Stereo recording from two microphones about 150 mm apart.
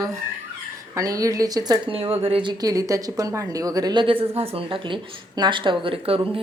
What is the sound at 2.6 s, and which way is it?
Speech, 25° right (ahead or behind).